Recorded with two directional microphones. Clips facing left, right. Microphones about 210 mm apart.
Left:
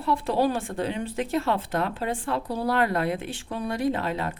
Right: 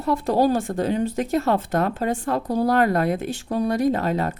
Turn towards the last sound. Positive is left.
turn(degrees=-40)  # may be behind; listen again after turning